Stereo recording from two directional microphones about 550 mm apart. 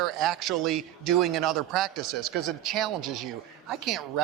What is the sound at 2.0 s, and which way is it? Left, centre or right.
Speech, right.